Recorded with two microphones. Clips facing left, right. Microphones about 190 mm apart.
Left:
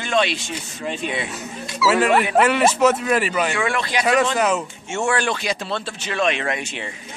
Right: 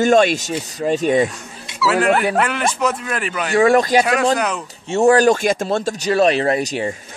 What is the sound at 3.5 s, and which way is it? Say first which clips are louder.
Speech: right 10 dB; 40° right (ahead or behind).